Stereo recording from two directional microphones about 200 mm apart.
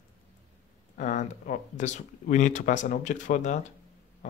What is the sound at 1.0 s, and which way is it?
Speech, 40° left (ahead or behind).